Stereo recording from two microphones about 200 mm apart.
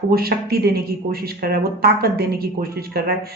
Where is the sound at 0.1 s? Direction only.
50° right (ahead or behind).